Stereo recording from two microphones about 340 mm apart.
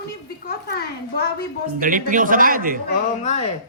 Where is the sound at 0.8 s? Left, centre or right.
Left.